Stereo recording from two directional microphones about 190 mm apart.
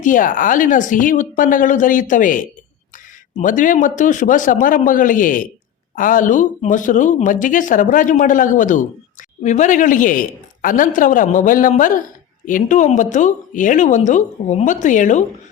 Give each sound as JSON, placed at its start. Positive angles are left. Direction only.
{"t": 0.0, "sound": "speech", "side_deg": 45}